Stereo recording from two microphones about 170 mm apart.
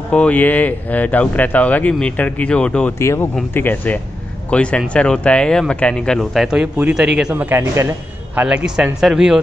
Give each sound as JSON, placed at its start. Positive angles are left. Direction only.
{"t": 0.1, "sound": "speech", "side_deg": 10}